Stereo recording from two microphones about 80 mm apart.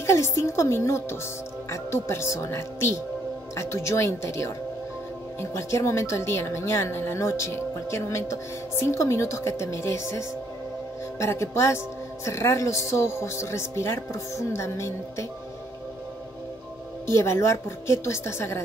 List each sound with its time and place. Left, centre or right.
0.0 s speech: left
17.0 s speech: left